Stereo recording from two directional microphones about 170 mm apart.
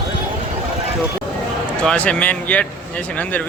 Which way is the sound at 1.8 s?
5° left (ahead or behind).